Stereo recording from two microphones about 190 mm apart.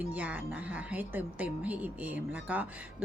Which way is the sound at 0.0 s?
10° right (ahead or behind).